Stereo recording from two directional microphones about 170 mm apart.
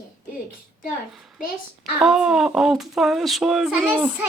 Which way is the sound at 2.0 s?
5° right (ahead or behind).